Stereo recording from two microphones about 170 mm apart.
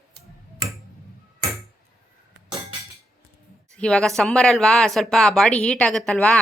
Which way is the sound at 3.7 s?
5° left (ahead or behind).